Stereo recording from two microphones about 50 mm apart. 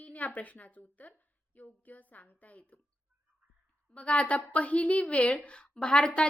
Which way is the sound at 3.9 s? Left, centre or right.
Left.